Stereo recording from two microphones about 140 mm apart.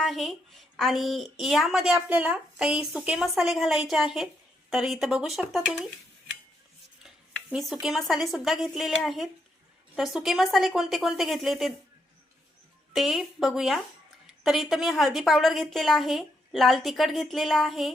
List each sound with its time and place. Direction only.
0.0 s a woman's voice: centre (ahead or behind)
7.5 s a woman's voice: centre (ahead or behind)
12.9 s a woman's voice: centre (ahead or behind)